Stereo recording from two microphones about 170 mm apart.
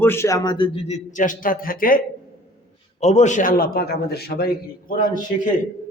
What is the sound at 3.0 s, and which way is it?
A man's voice, 40° left (ahead or behind).